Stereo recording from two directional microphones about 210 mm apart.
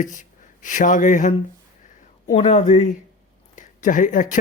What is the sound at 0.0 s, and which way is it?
Speech, 35° left (ahead or behind).